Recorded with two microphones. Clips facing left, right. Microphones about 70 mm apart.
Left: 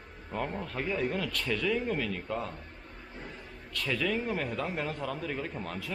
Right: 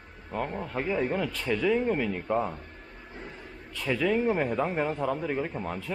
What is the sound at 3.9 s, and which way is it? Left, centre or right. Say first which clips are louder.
Speech: right 6 dB; centre.